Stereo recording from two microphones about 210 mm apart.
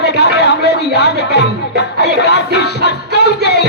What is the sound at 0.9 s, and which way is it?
Speech, 55° left (ahead or behind).